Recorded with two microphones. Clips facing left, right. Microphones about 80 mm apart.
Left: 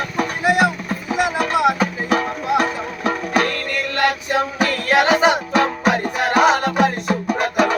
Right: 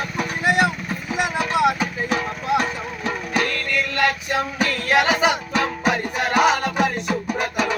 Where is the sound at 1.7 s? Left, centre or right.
Left.